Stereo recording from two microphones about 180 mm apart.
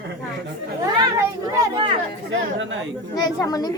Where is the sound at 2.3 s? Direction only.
90° right.